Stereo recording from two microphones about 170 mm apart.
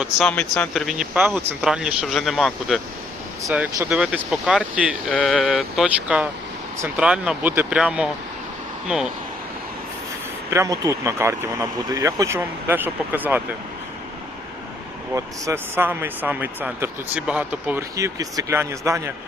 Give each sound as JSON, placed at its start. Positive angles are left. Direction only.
{"t": 0.0, "sound": "speech", "side_deg": 5}
{"t": 10.5, "sound": "speech", "side_deg": -15}
{"t": 15.1, "sound": "speech", "side_deg": -15}